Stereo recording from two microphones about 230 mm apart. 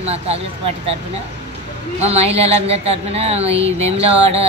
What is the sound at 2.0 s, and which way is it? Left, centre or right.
Speech, right.